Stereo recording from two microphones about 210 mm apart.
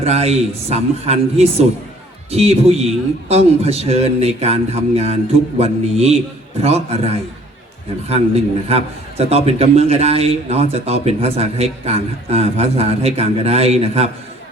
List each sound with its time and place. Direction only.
0.0 s a man's voice: 30° right (ahead or behind)
8.7 s a man's voice: 30° right (ahead or behind)